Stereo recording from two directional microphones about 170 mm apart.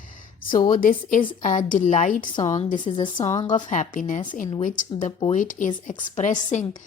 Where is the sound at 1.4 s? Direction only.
50° left (ahead or behind).